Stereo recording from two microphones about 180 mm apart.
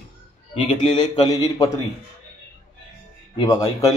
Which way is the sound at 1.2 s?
20° left (ahead or behind).